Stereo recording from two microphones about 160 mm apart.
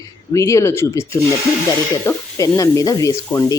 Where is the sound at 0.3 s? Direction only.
20° left (ahead or behind).